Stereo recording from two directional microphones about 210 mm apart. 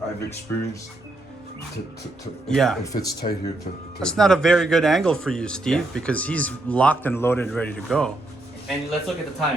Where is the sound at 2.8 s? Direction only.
15° left (ahead or behind).